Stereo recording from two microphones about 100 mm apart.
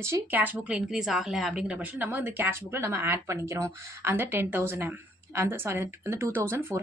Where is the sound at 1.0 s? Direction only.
5° right (ahead or behind).